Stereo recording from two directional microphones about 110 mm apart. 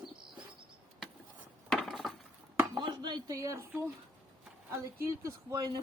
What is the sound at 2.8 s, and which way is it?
Speech, 45° right (ahead or behind).